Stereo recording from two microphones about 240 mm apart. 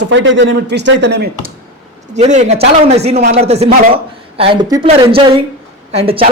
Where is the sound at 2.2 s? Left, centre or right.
Right.